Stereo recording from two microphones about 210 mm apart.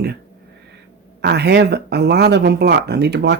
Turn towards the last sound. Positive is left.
turn(degrees=-55)  # may be behind; listen again after turning